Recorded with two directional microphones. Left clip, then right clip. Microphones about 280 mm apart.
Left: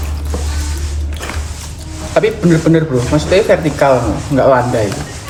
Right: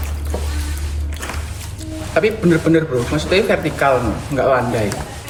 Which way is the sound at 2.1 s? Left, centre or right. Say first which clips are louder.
Left 3 dB; centre.